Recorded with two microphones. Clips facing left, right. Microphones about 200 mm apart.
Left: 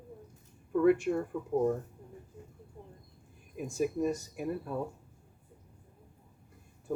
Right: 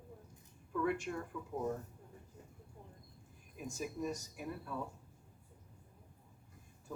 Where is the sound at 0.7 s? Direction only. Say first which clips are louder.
Left 11 dB; 55° left (ahead or behind).